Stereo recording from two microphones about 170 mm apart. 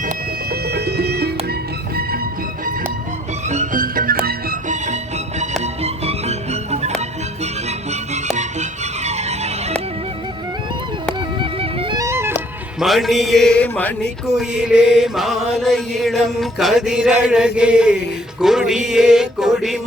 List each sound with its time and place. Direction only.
0.5 s music: 75° right (ahead or behind)
3.5 s music: 50° right (ahead or behind)
5.4 s music: 40° right (ahead or behind)
8.1 s music: 40° right (ahead or behind)
11.3 s music: 30° right (ahead or behind)
11.9 s music: 15° right (ahead or behind)
12.8 s chant: centre (ahead or behind)
14.3 s chant: 5° right (ahead or behind)